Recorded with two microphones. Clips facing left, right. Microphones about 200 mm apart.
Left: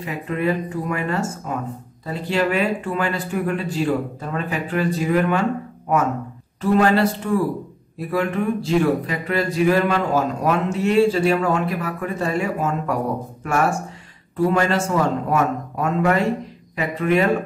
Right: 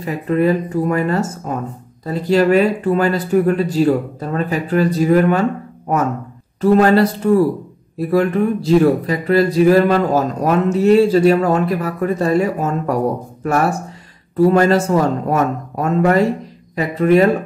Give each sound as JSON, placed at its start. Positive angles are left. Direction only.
{"t": 0.0, "sound": "speech", "side_deg": -40}
{"t": 6.6, "sound": "speech", "side_deg": -40}
{"t": 8.1, "sound": "speech", "side_deg": -40}